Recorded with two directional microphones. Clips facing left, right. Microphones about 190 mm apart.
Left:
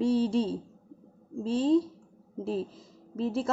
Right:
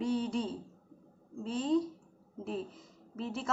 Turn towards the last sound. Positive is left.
turn(degrees=35)  # may be behind; listen again after turning